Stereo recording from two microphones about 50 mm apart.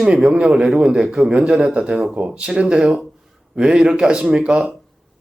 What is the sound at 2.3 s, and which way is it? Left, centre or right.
Speech, centre.